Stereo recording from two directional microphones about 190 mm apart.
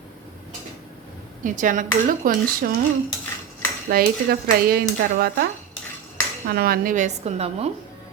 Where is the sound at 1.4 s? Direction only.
45° right (ahead or behind).